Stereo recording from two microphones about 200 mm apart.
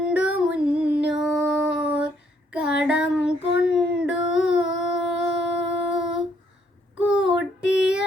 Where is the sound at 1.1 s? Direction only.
Centre (ahead or behind).